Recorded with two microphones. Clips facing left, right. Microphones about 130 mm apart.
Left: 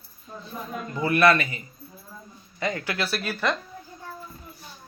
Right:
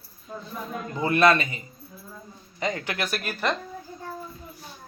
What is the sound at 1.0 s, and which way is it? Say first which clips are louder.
Mantra: even; 20° right (ahead or behind).